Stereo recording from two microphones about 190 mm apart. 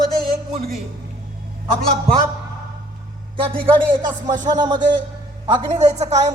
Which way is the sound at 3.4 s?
30° right (ahead or behind).